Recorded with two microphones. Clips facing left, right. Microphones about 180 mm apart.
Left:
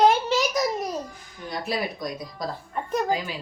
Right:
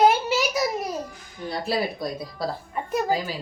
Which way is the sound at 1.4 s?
30° right (ahead or behind).